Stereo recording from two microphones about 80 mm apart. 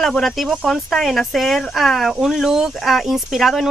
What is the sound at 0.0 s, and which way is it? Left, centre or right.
Speech, centre.